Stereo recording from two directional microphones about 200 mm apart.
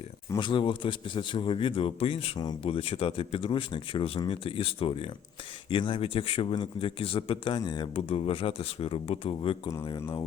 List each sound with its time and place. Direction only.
0.3 s speech: 25° left (ahead or behind)